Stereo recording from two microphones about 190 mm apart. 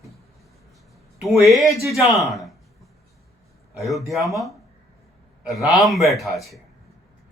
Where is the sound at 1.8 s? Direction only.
Centre (ahead or behind).